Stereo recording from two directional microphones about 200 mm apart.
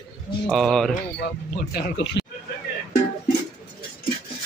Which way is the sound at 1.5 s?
50° left (ahead or behind).